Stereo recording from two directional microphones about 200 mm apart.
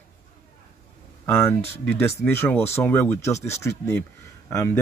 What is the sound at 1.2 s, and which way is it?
Speech, 10° left (ahead or behind).